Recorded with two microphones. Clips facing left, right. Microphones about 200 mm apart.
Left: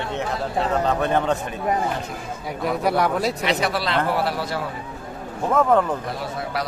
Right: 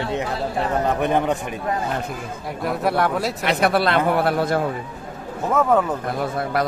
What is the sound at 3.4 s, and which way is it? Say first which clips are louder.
A man's voice: right 4 dB; 55° right (ahead or behind).